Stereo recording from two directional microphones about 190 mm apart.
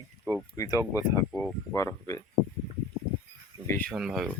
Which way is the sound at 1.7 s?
15° left (ahead or behind).